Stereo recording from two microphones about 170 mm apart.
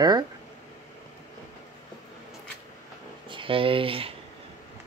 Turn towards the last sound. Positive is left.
turn(degrees=-30)  # may be behind; listen again after turning